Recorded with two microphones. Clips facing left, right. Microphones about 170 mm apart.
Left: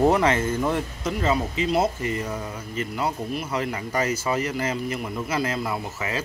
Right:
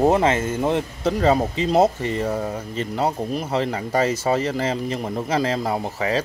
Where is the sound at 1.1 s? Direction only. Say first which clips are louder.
Right 6 dB; 35° right (ahead or behind).